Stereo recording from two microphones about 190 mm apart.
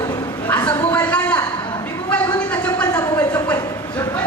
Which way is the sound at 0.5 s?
5° left (ahead or behind).